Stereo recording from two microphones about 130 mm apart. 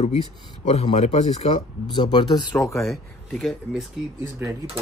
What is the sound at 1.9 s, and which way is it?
Speech, 35° left (ahead or behind).